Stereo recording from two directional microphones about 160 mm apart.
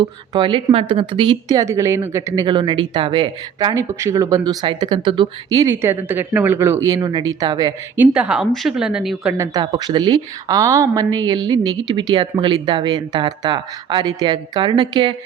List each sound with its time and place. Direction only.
0.0 s a woman's voice: 30° right (ahead or behind)
7.9 s a woman's voice: 10° right (ahead or behind)
9.4 s a woman's voice: 25° right (ahead or behind)